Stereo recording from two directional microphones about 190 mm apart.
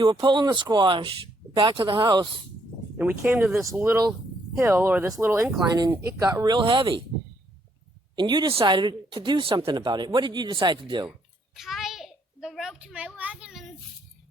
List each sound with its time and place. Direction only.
0.0 s speech: 25° right (ahead or behind)
3.0 s speech: 10° right (ahead or behind); by 7.0 s 25° right (ahead or behind)
8.1 s speech: 25° right (ahead or behind)
11.5 s a sound: centre (ahead or behind)